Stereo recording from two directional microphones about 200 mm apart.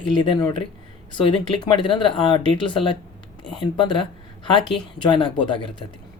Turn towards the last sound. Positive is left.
turn(degrees=25)  # may be behind; listen again after turning